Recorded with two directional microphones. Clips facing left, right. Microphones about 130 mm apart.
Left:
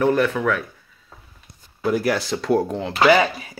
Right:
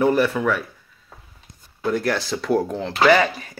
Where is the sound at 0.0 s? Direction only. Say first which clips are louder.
Even; 5° right (ahead or behind).